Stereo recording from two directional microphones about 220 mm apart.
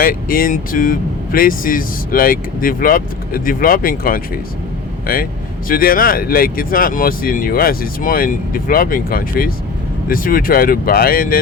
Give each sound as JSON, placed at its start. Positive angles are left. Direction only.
{"t": 0.0, "sound": "speech", "side_deg": 40}